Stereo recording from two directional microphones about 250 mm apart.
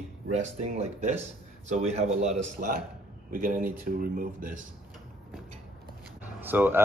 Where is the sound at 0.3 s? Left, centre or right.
Right.